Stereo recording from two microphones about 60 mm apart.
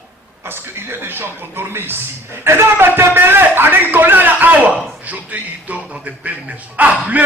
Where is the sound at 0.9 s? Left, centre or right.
Right.